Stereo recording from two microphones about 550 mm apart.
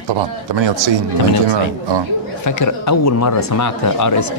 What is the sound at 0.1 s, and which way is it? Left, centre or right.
Speech, right.